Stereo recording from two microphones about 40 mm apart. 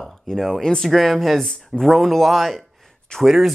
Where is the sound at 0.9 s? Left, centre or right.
Centre.